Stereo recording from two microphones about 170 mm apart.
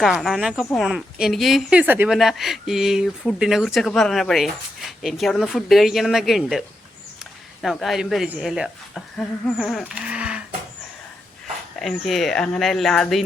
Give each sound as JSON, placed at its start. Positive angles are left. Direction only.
{"t": 0.0, "sound": "speech", "side_deg": 0}
{"t": 11.8, "sound": "speech", "side_deg": 0}